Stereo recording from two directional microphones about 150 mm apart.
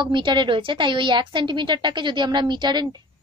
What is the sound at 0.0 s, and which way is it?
A woman's voice, 30° right (ahead or behind).